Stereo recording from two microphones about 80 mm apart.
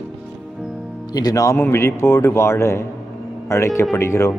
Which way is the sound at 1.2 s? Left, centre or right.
Left.